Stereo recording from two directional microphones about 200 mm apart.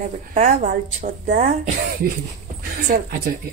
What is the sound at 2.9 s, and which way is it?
Speech, 40° right (ahead or behind).